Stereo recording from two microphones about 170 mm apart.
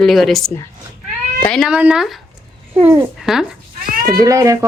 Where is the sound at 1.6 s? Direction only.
5° right (ahead or behind).